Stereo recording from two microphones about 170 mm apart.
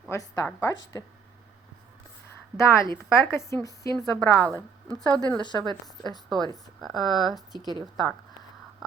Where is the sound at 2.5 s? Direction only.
15° left (ahead or behind).